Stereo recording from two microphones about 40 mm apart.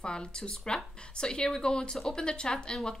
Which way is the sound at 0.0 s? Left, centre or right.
Left.